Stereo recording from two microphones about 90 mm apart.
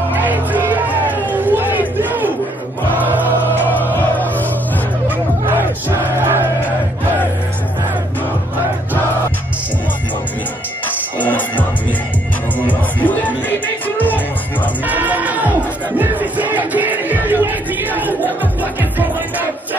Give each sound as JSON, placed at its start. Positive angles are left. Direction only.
{"t": 0.1, "sound": "music", "side_deg": -20}
{"t": 1.3, "sound": "crowd", "side_deg": -20}
{"t": 3.0, "sound": "choir", "side_deg": -20}
{"t": 3.9, "sound": "music", "side_deg": 20}
{"t": 5.5, "sound": "music", "side_deg": -25}
{"t": 11.1, "sound": "music", "side_deg": 20}
{"t": 14.9, "sound": "music", "side_deg": -20}